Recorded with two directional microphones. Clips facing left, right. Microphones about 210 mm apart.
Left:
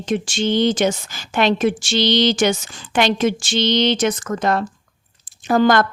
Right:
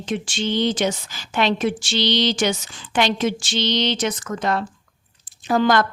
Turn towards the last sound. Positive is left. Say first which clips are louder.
# left 3 dB
turn(degrees=50)  # may be behind; listen again after turning